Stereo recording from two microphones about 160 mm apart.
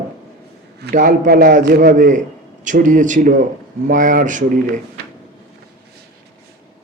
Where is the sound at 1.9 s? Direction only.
50° right (ahead or behind).